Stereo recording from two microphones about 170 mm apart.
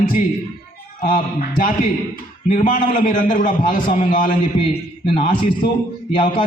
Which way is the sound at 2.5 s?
50° left (ahead or behind).